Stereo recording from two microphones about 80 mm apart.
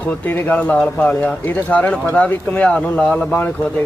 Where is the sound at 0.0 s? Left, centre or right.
Left; by 3.2 s centre.